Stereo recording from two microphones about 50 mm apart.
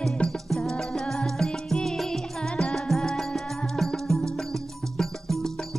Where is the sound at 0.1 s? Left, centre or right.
Centre.